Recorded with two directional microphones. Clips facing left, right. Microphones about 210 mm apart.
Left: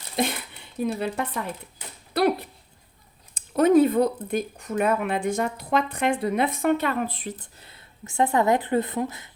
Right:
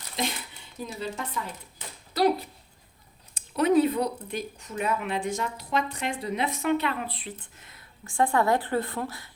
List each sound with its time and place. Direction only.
0.2 s speech: 55° left (ahead or behind)
2.1 s dog: 60° left (ahead or behind)
3.3 s speech: 50° left (ahead or behind)
7.6 s speech: 30° left (ahead or behind)